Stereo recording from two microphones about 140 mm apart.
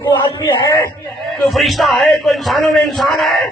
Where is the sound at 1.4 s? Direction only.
Centre (ahead or behind).